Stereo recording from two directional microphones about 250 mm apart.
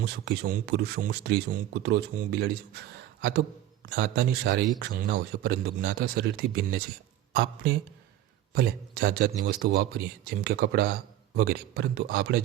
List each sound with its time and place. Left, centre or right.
0.0 s speech: right